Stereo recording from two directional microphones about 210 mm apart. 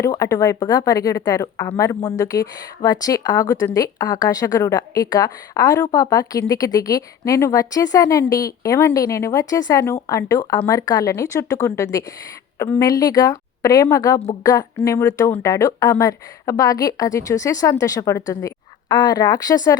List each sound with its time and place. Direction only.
0.0 s a woman's voice: 15° left (ahead or behind)